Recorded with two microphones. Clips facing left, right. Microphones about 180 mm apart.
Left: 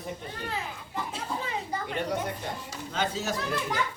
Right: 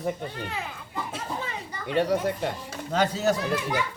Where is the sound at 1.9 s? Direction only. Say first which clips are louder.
Right 9 dB; 70° right (ahead or behind).